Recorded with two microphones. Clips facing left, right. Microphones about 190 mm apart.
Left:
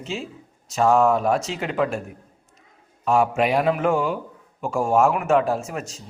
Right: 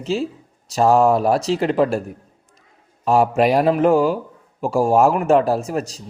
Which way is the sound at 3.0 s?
35° right (ahead or behind).